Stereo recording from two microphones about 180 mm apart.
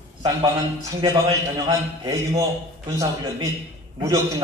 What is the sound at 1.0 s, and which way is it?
A man's voice, 20° right (ahead or behind).